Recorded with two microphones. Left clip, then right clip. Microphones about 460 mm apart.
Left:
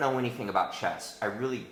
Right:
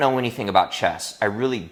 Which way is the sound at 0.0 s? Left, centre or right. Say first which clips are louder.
Right 8 dB; right.